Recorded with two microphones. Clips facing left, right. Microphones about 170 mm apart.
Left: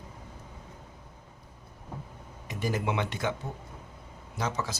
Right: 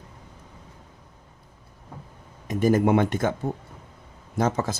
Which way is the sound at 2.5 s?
50° right (ahead or behind).